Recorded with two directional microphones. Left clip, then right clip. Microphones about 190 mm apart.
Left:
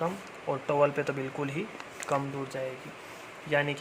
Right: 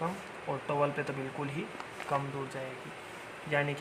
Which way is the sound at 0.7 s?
45° left (ahead or behind).